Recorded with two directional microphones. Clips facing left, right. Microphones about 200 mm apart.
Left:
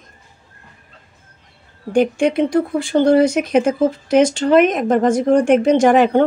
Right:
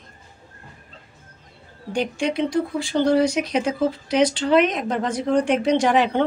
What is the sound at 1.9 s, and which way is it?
Speech, 55° left (ahead or behind).